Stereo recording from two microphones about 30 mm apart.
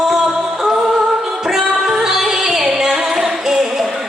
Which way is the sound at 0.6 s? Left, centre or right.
Right.